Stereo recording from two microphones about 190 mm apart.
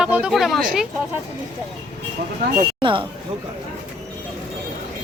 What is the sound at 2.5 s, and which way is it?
Speech, 25° right (ahead or behind).